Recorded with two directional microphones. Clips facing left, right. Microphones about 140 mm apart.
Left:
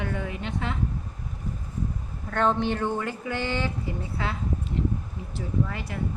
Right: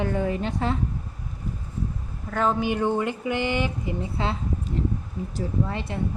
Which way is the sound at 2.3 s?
5° right (ahead or behind).